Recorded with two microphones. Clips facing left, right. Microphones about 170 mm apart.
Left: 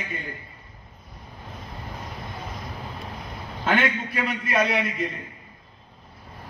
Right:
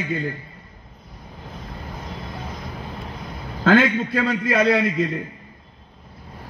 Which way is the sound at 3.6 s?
90° right.